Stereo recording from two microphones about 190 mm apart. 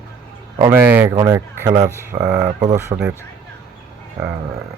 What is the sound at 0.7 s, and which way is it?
Speech, 10° right (ahead or behind).